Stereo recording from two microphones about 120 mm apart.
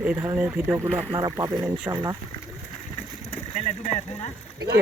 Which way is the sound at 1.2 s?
30° right (ahead or behind).